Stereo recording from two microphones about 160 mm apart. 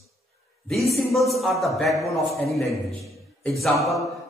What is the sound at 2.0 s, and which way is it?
Speech, 20° left (ahead or behind).